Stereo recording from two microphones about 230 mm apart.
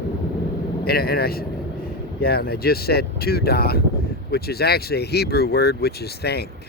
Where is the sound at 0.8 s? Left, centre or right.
Left.